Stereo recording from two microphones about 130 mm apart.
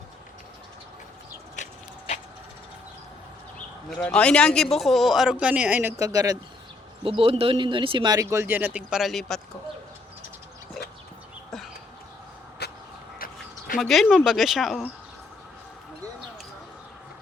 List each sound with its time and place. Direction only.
1.6 s a sound: 65° left (ahead or behind)
3.8 s speech: 5° left (ahead or behind); by 5.9 s 10° right (ahead or behind)
6.0 s speech: 25° right (ahead or behind)
7.0 s speech: 45° right (ahead or behind); by 9.4 s centre (ahead or behind)
13.1 s a sound: 90° left
13.7 s speech: centre (ahead or behind)